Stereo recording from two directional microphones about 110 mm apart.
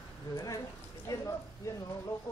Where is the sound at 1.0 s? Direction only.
30° left (ahead or behind).